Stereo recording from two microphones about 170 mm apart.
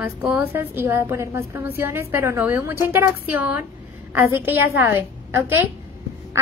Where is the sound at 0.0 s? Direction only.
10° right (ahead or behind).